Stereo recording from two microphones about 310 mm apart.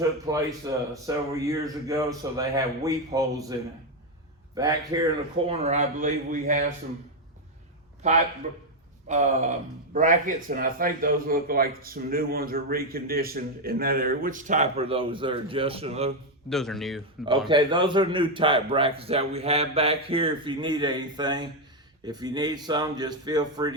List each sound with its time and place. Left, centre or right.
0.3 s a man's voice: centre
4.5 s a man's voice: centre
8.0 s a man's voice: right
16.5 s speech: centre
17.5 s a man's voice: centre